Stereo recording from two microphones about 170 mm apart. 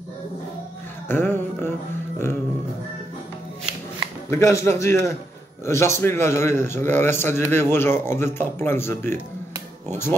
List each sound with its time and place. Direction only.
1.0 s music: 10° left (ahead or behind)
4.3 s a man's voice: 15° left (ahead or behind)